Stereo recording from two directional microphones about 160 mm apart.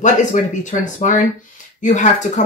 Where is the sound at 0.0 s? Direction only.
50° left (ahead or behind).